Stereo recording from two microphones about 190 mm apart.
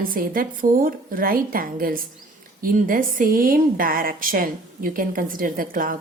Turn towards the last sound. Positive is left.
turn(degrees=-45)  # may be behind; listen again after turning